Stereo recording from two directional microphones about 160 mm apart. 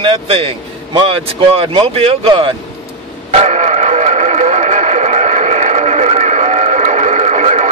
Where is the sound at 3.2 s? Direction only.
45° right (ahead or behind).